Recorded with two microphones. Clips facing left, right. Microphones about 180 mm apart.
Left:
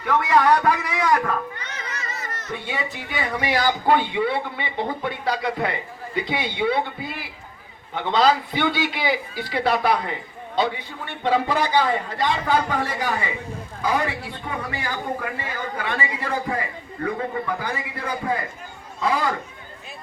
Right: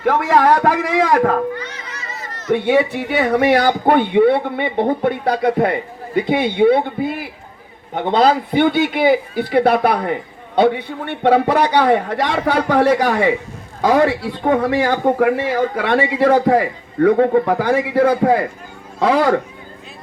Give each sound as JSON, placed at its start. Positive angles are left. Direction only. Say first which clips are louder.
{"t": 0.6, "sound": "speech", "louder": "right 6 dB", "side_deg": -90}
{"t": 1.2, "sound": "a man's voice", "louder": "right 10 dB", "side_deg": -55}
{"t": 2.5, "sound": "a man's voice", "louder": "right 16 dB", "side_deg": -65}